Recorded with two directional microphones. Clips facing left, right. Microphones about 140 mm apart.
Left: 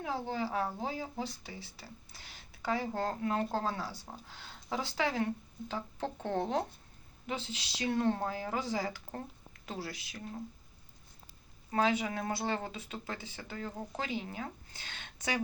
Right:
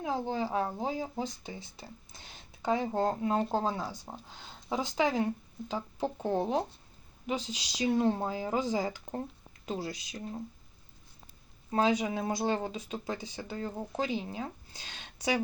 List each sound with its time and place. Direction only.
0.0 s speech: 15° right (ahead or behind)
11.7 s speech: 15° right (ahead or behind)